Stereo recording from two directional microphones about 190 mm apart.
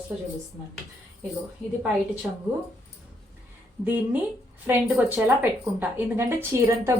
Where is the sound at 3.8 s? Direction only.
10° right (ahead or behind).